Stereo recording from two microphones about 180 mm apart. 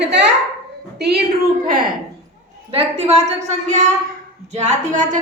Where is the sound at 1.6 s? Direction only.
50° right (ahead or behind).